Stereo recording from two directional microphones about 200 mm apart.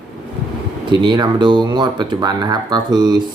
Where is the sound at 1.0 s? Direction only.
20° right (ahead or behind).